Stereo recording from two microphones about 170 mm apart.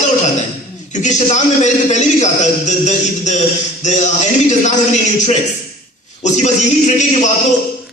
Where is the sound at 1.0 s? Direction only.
45° left (ahead or behind).